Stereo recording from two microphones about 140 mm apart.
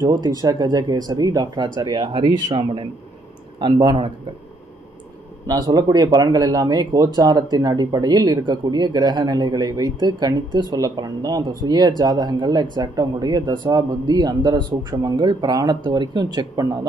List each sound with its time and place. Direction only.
0.0 s speech: 25° right (ahead or behind)
5.5 s speech: 30° right (ahead or behind)